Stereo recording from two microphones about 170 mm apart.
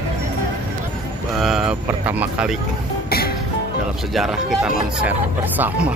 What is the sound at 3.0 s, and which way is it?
Music, 65° left (ahead or behind).